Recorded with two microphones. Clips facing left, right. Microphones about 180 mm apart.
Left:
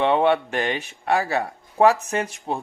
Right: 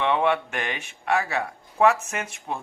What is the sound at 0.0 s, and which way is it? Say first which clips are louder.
Speech: left 4 dB; 35° left (ahead or behind).